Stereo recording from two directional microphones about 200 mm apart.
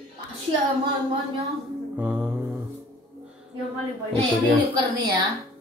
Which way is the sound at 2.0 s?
10° right (ahead or behind).